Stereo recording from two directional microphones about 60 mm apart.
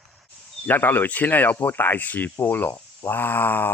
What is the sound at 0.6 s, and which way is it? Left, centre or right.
Speech, left.